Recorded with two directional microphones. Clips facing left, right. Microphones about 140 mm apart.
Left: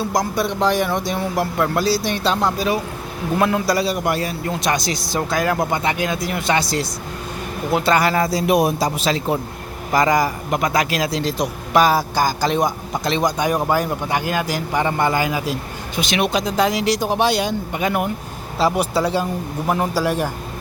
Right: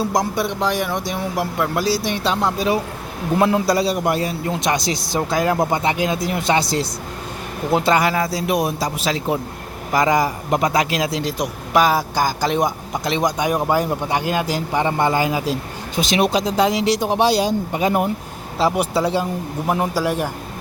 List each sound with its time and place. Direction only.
0.0 s a man's voice: 25° right (ahead or behind)
8.1 s speech: 5° right (ahead or behind)
9.0 s a man's voice: 10° right (ahead or behind); by 18.1 s 30° right (ahead or behind)
18.6 s a man's voice: 20° right (ahead or behind)